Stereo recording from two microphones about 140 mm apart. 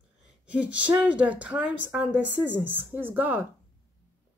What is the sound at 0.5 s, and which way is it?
A woman's voice, 10° right (ahead or behind).